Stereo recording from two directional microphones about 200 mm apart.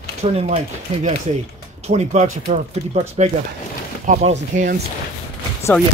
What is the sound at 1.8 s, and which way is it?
Speech, 35° right (ahead or behind).